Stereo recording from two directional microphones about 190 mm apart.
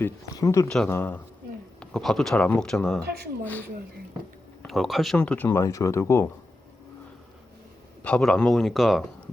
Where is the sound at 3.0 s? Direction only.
55° right (ahead or behind).